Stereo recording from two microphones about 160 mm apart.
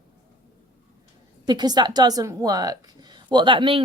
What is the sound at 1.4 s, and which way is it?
A woman's voice, 25° right (ahead or behind).